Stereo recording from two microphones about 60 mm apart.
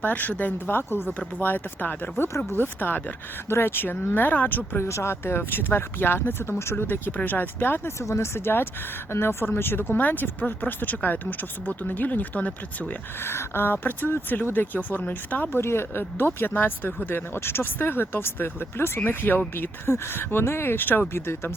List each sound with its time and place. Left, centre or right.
0.0 s speech: left
4.9 s speech: left
8.0 s speech: left
13.2 s speech: left
15.6 s speech: left